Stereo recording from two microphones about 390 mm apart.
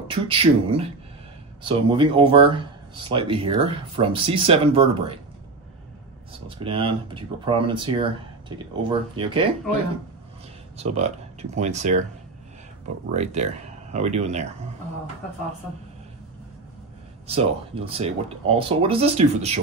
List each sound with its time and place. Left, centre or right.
0.3 s speech: centre
6.6 s speech: centre
10.8 s speech: centre
13.1 s speech: centre
17.3 s speech: centre